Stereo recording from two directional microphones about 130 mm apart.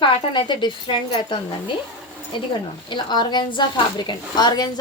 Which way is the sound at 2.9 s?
35° left (ahead or behind).